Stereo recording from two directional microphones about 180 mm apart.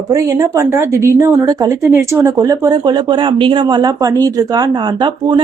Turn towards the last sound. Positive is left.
turn(degrees=-25)  # may be behind; listen again after turning